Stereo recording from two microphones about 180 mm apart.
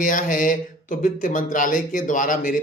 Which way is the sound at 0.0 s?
45° left (ahead or behind).